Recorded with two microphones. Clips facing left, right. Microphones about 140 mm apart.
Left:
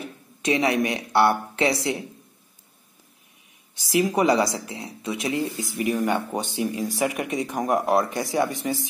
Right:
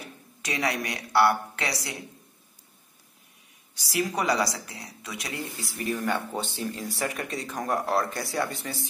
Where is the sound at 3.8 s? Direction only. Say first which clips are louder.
Left 6 dB; 20° left (ahead or behind).